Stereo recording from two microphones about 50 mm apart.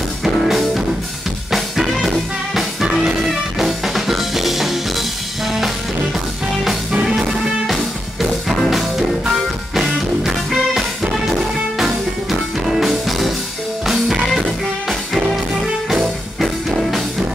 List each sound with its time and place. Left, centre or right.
0.4 s music: centre
6.9 s music: centre
7.2 s music: centre